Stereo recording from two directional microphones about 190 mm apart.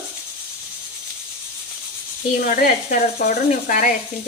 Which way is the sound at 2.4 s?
45° left (ahead or behind).